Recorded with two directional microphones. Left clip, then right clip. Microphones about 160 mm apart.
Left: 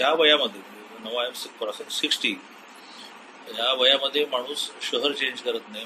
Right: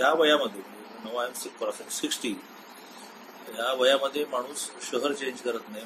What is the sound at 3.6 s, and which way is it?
A man's voice, 15° right (ahead or behind).